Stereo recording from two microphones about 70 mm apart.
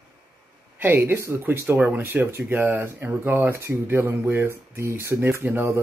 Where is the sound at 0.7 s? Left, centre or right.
Right.